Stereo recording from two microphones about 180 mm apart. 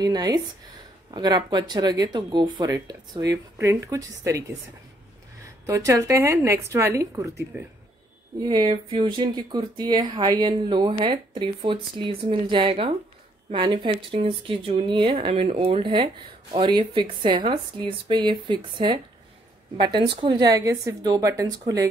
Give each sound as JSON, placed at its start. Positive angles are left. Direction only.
{"t": 0.0, "sound": "a woman's voice", "side_deg": -20}
{"t": 8.4, "sound": "speech", "side_deg": -25}